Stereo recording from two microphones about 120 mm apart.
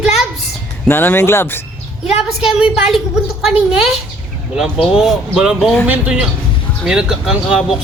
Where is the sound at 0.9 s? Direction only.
20° left (ahead or behind).